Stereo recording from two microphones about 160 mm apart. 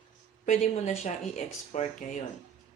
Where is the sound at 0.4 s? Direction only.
45° left (ahead or behind).